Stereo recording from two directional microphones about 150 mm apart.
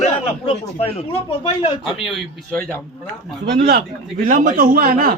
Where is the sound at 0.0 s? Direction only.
45° left (ahead or behind).